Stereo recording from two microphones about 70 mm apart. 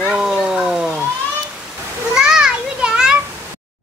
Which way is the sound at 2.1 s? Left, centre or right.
Centre.